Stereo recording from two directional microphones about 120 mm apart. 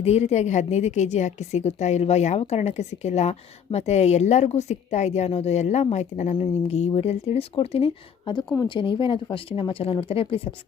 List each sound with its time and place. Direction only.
0.0 s a woman's voice: 65° left (ahead or behind)
8.2 s speech: 40° left (ahead or behind)